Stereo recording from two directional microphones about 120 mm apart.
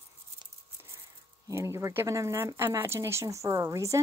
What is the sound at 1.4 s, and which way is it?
Speech, 25° right (ahead or behind).